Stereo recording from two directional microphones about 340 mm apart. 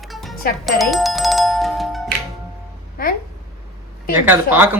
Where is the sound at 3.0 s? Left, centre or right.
Left.